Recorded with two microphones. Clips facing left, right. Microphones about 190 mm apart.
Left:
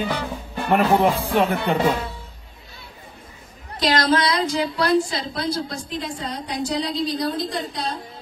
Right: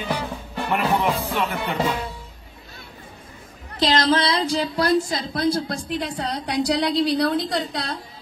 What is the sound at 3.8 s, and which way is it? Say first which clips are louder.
Speech: even; 25° right (ahead or behind).